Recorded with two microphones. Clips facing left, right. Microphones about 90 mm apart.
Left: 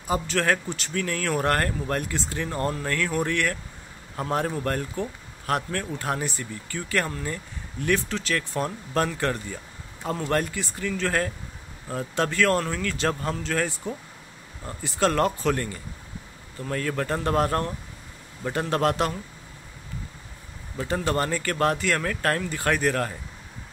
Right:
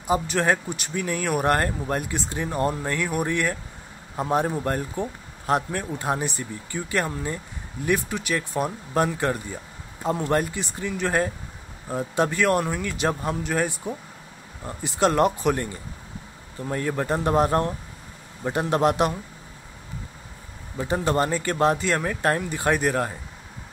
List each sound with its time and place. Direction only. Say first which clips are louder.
0.0 s speech: right 2 dB; 20° right (ahead or behind)
20.7 s speech: right 2 dB; 20° right (ahead or behind)